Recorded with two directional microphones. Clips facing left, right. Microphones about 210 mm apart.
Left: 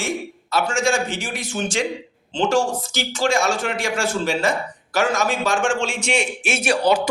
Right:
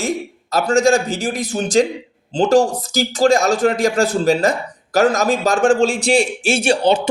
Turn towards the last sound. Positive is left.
turn(degrees=-25)  # may be behind; listen again after turning